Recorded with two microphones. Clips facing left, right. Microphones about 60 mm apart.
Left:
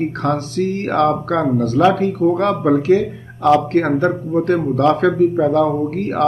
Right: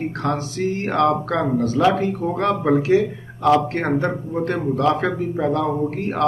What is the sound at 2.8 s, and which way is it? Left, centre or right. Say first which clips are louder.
Speech: left 3 dB; left.